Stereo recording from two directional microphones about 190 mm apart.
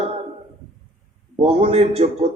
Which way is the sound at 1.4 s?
30° right (ahead or behind).